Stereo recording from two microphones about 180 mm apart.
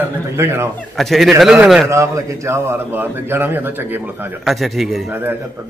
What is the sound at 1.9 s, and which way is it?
A man's voice, 15° right (ahead or behind).